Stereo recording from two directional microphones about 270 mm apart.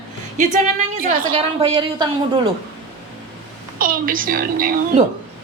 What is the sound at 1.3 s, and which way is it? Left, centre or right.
Speech, right.